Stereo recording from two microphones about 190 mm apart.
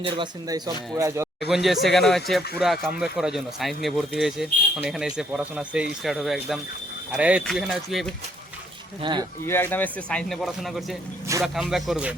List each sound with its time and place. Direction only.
0.0 s speech: 25° right (ahead or behind)
1.5 s speech: centre (ahead or behind)
9.0 s speech: 25° right (ahead or behind)
9.5 s speech: 10° left (ahead or behind)